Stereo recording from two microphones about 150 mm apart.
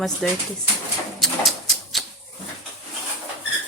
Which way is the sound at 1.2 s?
Centre (ahead or behind).